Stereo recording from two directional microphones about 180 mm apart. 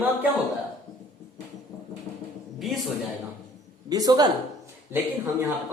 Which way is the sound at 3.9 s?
20° right (ahead or behind).